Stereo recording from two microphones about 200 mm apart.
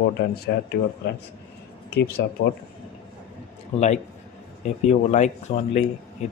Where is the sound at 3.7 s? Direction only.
35° left (ahead or behind).